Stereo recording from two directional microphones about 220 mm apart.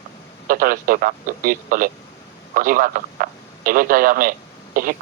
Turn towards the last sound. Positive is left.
turn(degrees=-40)  # may be behind; listen again after turning